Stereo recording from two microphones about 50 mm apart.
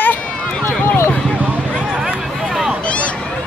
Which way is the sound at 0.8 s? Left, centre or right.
Left.